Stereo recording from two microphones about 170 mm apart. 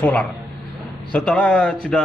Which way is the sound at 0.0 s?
5° left (ahead or behind).